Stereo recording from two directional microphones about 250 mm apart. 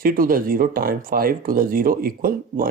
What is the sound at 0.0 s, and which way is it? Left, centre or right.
Speech, right.